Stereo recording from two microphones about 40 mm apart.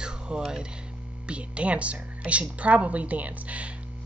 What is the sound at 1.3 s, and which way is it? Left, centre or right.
A woman's voice, right.